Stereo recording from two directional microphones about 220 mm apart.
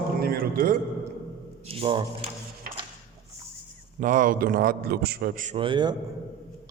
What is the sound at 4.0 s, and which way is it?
A man's voice, 35° right (ahead or behind).